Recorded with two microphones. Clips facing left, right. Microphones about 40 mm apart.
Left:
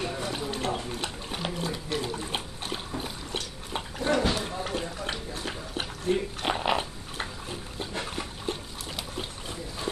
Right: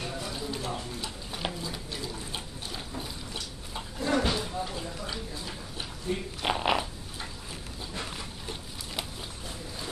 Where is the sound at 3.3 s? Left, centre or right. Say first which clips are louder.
Left 7 dB; left.